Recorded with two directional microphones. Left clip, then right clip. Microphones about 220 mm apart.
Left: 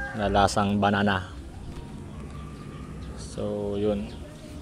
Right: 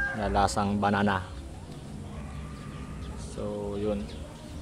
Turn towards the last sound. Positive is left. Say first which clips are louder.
# left 4 dB
turn(degrees=15)  # may be behind; listen again after turning